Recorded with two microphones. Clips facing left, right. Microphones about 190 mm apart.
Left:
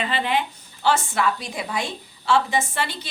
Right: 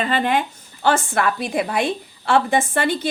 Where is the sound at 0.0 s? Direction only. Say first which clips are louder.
Right 4 dB; 45° right (ahead or behind).